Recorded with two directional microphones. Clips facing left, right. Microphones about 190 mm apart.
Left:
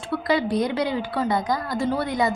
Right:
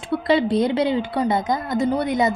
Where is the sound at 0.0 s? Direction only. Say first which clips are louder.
Right 4 dB; 25° right (ahead or behind).